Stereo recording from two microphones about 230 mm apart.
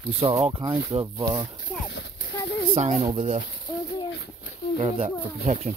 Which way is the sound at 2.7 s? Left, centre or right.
Right.